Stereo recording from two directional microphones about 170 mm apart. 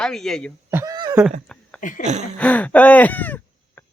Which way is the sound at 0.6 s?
15° right (ahead or behind).